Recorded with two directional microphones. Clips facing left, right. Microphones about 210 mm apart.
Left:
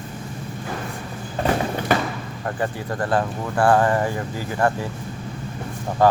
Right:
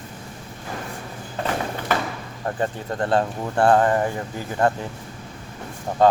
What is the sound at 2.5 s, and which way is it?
Speech, 25° right (ahead or behind).